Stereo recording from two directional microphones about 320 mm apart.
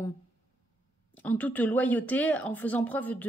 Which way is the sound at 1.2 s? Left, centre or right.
Centre.